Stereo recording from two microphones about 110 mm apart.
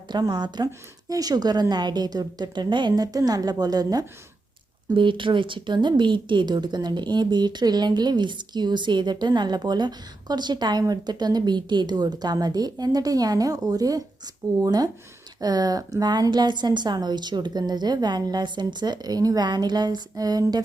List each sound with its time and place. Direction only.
0.1 s speech: 40° right (ahead or behind)
4.9 s speech: 50° right (ahead or behind)